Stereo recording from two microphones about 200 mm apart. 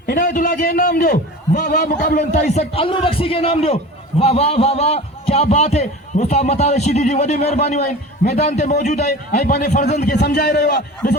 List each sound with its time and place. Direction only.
0.0 s a man's voice: 45° left (ahead or behind)
2.6 s a man's voice: 25° left (ahead or behind)
10.2 s a man's voice: 50° left (ahead or behind)